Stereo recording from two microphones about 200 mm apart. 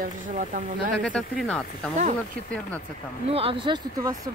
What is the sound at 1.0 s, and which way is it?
Speech, 5° left (ahead or behind).